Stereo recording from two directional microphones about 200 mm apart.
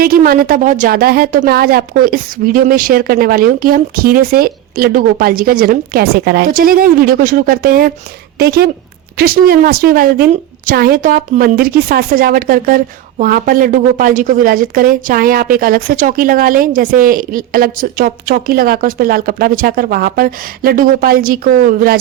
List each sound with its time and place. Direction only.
0.0 s a woman's voice: 45° right (ahead or behind)